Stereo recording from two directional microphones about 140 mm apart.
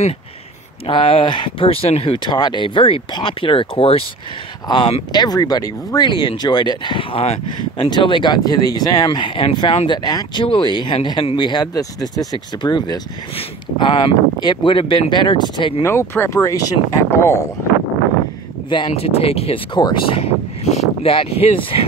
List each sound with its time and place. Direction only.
0.8 s speech: 40° left (ahead or behind)
15.8 s speech: 20° left (ahead or behind)
18.7 s speech: 40° left (ahead or behind)